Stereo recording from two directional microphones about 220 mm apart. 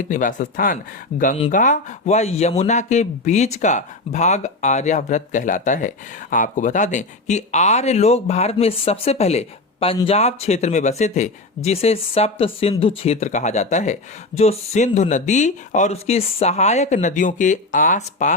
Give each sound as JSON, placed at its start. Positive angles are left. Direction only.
{"t": 0.1, "sound": "speech", "side_deg": 35}